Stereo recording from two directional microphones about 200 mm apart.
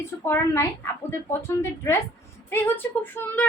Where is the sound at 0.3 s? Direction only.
10° left (ahead or behind).